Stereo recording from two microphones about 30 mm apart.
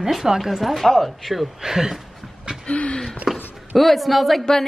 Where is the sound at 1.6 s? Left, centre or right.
Centre.